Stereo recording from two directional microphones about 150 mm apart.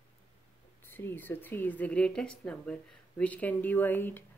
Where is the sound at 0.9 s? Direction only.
15° left (ahead or behind).